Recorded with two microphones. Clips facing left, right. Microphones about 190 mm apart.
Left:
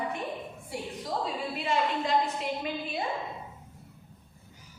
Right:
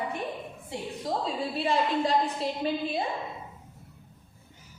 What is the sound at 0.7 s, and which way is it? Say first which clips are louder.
A woman's voice: right 2 dB; 25° right (ahead or behind).